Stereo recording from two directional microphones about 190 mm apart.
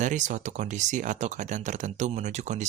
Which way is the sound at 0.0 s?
40° right (ahead or behind).